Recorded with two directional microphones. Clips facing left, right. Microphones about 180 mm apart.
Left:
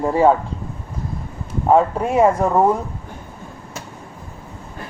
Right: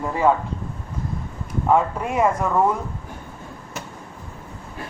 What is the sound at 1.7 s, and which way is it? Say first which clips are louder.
Speech: left 5 dB; 35° left (ahead or behind).